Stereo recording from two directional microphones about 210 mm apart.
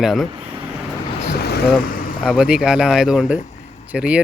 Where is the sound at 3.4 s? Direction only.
30° left (ahead or behind).